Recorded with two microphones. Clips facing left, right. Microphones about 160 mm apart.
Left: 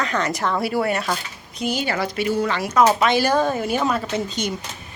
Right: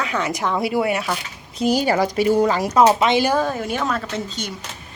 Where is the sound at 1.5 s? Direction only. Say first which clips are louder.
Right 6 dB; 40° right (ahead or behind); by 3.3 s 20° right (ahead or behind).